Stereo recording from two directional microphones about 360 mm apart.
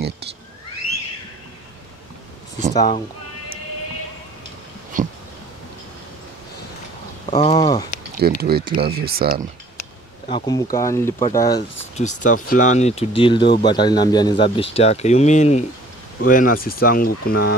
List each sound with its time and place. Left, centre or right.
4.9 s a sound: right
7.2 s speech: centre
8.2 s speech: right
10.3 s speech: centre; by 17.6 s left